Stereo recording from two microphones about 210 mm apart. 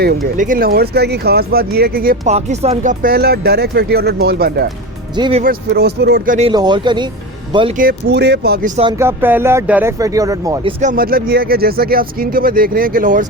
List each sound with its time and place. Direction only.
0.3 s speech: 40° right (ahead or behind)
2.3 s speech: 30° right (ahead or behind); by 4.6 s 50° right (ahead or behind)
5.1 s speech: 20° right (ahead or behind)
5.4 s speech: 45° right (ahead or behind)
6.5 s speech: 20° right (ahead or behind)
7.8 s speech: 50° right (ahead or behind)
8.7 s speech: 25° right (ahead or behind)
9.0 s speech: 10° right (ahead or behind); by 13.2 s 40° right (ahead or behind)